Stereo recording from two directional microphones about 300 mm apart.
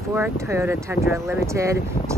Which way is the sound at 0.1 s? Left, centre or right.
Centre.